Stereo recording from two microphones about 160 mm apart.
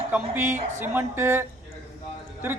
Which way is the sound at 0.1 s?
15° right (ahead or behind).